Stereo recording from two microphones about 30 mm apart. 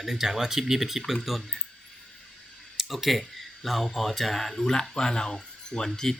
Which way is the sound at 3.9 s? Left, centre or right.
Centre.